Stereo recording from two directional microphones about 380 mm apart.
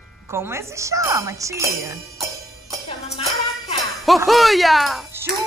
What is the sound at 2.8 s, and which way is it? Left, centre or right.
Music, centre.